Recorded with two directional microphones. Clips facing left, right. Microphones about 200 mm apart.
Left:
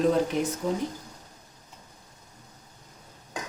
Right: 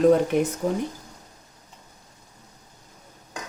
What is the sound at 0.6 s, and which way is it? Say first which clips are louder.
Speech: right 3 dB; 45° right (ahead or behind).